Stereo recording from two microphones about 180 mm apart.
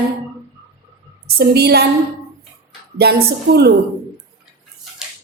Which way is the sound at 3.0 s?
60° right (ahead or behind).